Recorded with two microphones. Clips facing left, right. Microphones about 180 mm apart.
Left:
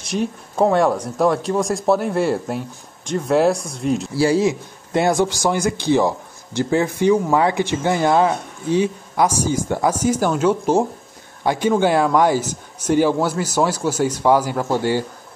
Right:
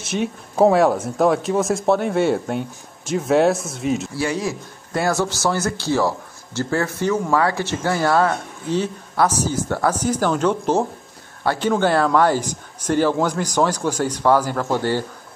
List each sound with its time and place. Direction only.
0.0 s speech: centre (ahead or behind)
4.2 s a man's voice: 30° left (ahead or behind); by 15.0 s 10° left (ahead or behind)